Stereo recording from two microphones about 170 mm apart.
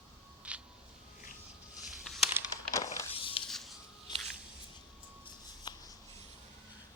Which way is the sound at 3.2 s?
30° left (ahead or behind).